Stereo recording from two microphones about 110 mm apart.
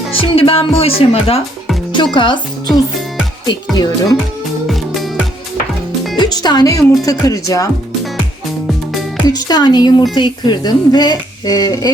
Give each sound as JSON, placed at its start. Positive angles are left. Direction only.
{"t": 0.2, "sound": "speech", "side_deg": 55}
{"t": 2.1, "sound": "a woman's voice", "side_deg": 45}
{"t": 4.6, "sound": "music", "side_deg": 0}
{"t": 6.1, "sound": "a woman's voice", "side_deg": 40}
{"t": 8.6, "sound": "music", "side_deg": 0}
{"t": 9.3, "sound": "a woman's voice", "side_deg": 40}